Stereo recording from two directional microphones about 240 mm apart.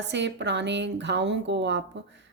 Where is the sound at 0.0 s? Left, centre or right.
Right.